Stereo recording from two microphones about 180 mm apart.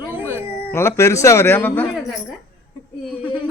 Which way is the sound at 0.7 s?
15° left (ahead or behind).